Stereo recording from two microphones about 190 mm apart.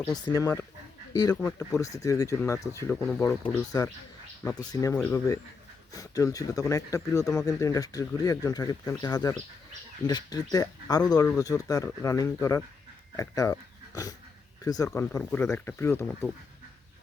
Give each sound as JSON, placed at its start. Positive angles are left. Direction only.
{"t": 0.0, "sound": "speech", "side_deg": 20}